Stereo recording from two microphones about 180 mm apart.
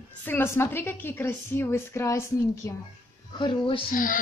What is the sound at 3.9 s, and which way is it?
Speech, 50° left (ahead or behind).